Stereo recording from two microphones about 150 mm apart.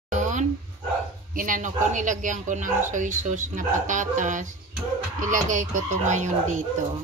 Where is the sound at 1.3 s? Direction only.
60° right (ahead or behind).